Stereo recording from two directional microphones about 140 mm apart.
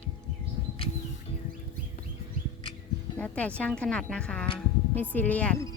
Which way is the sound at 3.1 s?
10° left (ahead or behind).